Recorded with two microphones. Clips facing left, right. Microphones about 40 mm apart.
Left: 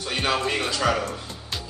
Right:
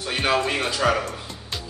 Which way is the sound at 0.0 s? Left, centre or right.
Centre.